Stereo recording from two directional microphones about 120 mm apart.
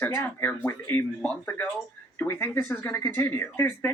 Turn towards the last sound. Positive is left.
turn(degrees=20)  # may be behind; listen again after turning